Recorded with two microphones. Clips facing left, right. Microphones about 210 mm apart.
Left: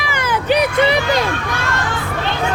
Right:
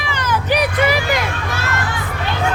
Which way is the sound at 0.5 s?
30° left (ahead or behind).